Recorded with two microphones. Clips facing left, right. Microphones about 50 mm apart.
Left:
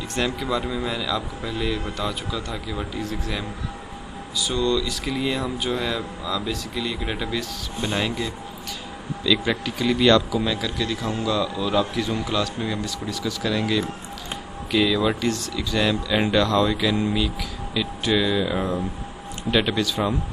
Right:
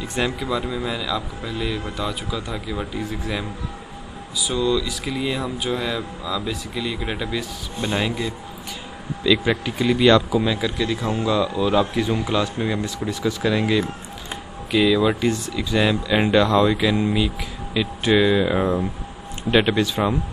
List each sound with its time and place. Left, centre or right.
0.2 s speech: centre
14.7 s speech: centre
15.2 s speech: centre